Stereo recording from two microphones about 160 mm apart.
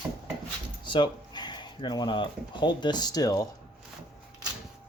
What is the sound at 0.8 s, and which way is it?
Speech, 30° left (ahead or behind).